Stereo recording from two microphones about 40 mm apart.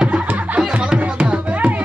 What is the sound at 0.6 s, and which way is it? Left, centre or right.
Music, right.